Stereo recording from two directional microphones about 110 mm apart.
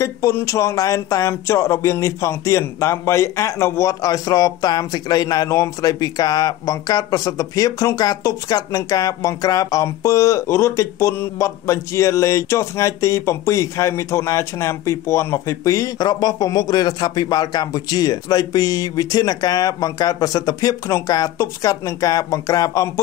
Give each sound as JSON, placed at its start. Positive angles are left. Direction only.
{"t": 0.0, "sound": "speech", "side_deg": 25}